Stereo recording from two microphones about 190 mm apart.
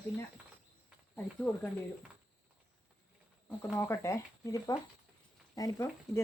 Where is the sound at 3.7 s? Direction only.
15° left (ahead or behind).